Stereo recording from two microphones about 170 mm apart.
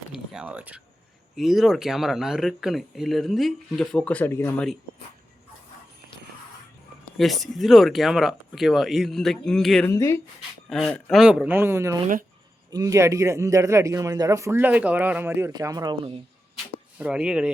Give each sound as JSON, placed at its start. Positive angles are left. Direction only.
{"t": 0.1, "sound": "speech", "side_deg": -5}
{"t": 7.2, "sound": "speech", "side_deg": 0}
{"t": 9.9, "sound": "speech", "side_deg": 15}
{"t": 10.7, "sound": "a man's voice", "side_deg": 5}
{"t": 17.0, "sound": "speech", "side_deg": -5}